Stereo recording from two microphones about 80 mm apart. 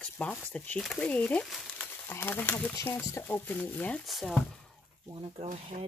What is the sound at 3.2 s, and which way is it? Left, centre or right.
Speech, left.